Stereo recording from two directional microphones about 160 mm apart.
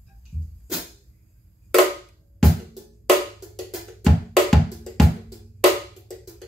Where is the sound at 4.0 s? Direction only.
Centre (ahead or behind).